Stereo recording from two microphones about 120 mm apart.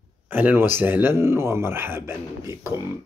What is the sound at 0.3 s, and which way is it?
Speech, 15° right (ahead or behind).